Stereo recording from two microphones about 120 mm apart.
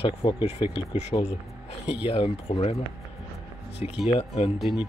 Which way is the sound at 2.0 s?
50° left (ahead or behind).